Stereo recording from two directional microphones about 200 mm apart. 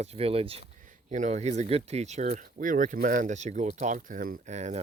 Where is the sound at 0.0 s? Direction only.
30° right (ahead or behind).